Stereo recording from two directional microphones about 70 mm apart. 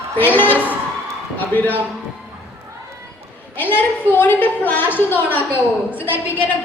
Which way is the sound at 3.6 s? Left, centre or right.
Left.